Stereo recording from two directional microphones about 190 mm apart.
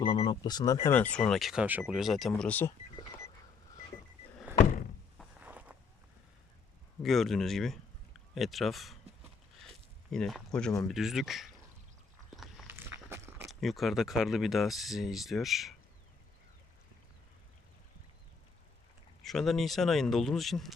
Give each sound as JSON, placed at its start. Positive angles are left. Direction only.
{"t": 0.0, "sound": "speech", "side_deg": 25}
{"t": 4.5, "sound": "door", "side_deg": -10}
{"t": 5.1, "sound": "walk", "side_deg": -5}
{"t": 7.0, "sound": "speech", "side_deg": 0}
{"t": 10.1, "sound": "speech", "side_deg": 0}
{"t": 12.6, "sound": "a sound", "side_deg": -15}
{"t": 13.5, "sound": "speech", "side_deg": 0}
{"t": 19.2, "sound": "speech", "side_deg": 0}